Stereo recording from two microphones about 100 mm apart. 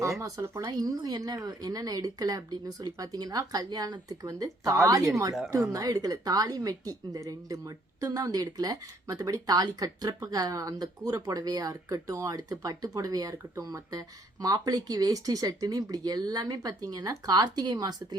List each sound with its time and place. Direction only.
0.2 s a woman's voice: 30° right (ahead or behind)